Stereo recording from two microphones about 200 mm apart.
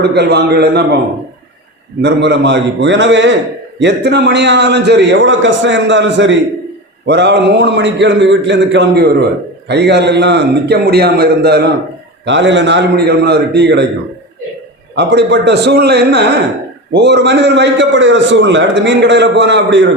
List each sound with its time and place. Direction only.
0.0 s a man's voice: 55° right (ahead or behind)
2.0 s a man's voice: 60° right (ahead or behind)
14.9 s a man's voice: 60° right (ahead or behind)